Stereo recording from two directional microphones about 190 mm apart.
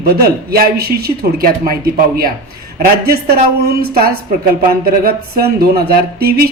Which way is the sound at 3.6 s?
55° right (ahead or behind).